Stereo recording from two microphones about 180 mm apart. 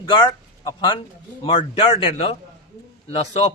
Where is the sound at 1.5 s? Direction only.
25° left (ahead or behind).